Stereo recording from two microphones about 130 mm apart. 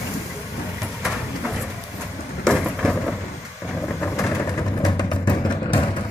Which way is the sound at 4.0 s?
25° left (ahead or behind).